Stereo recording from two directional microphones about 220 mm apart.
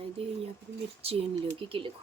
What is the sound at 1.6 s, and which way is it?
Speech, 25° right (ahead or behind).